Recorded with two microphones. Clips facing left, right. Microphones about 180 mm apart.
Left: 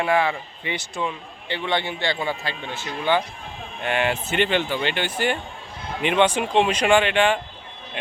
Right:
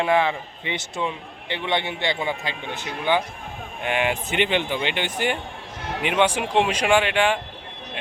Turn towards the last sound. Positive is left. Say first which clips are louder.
# left 1 dB
turn(degrees=-10)  # may be behind; listen again after turning